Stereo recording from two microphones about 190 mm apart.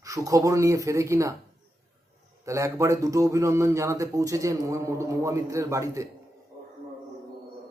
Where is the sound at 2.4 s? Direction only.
15° right (ahead or behind).